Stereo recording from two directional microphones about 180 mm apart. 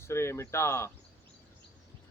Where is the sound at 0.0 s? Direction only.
15° left (ahead or behind).